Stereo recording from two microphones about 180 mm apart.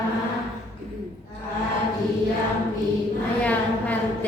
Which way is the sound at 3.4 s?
10° left (ahead or behind).